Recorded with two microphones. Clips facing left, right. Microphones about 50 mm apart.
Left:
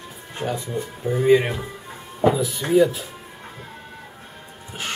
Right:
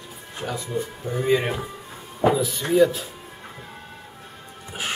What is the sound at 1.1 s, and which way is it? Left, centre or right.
Speech, centre.